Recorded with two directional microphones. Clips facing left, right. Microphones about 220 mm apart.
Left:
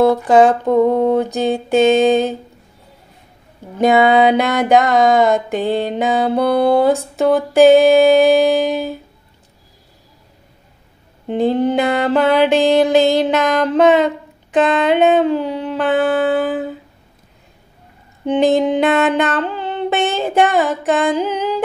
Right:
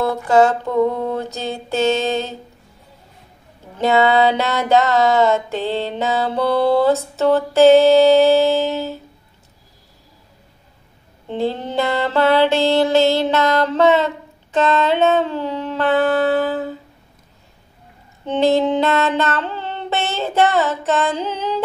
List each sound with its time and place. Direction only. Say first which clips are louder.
0.0 s mantra: left 4 dB; 15° left (ahead or behind)
3.7 s mantra: left 3 dB; 15° left (ahead or behind)
11.2 s mantra: left 7 dB; 15° left (ahead or behind)
18.2 s a sound: left 2 dB; 15° left (ahead or behind)